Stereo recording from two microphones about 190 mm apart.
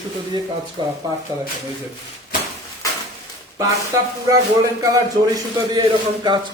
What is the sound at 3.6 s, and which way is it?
A man's voice, 15° right (ahead or behind).